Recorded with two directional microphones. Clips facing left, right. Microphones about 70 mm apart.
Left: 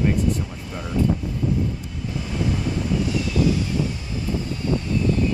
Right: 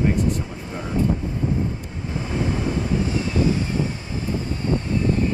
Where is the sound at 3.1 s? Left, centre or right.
Right.